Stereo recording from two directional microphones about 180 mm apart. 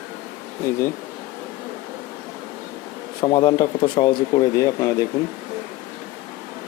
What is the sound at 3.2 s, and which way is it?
Speech, 25° left (ahead or behind).